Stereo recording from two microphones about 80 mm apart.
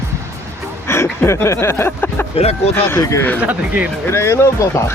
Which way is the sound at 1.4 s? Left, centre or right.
Left.